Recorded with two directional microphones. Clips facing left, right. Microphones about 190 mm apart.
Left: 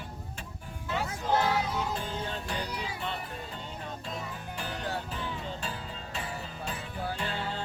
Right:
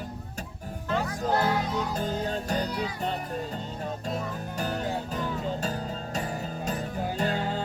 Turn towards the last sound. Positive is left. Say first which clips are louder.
# right 6 dB
turn(degrees=-40)  # may be behind; listen again after turning